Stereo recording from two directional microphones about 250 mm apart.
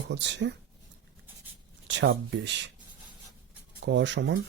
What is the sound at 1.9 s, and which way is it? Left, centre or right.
Speech, right.